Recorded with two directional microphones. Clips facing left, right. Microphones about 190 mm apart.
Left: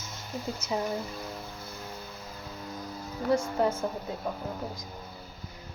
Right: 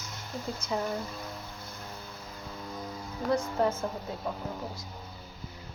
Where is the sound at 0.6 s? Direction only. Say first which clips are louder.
Left 1 dB; 10° left (ahead or behind).